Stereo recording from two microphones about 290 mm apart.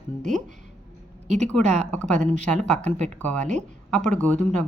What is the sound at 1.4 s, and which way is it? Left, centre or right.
Speech, centre.